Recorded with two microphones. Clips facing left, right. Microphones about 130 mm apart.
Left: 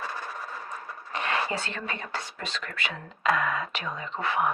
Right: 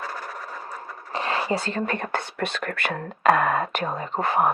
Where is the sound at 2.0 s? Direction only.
55° right (ahead or behind).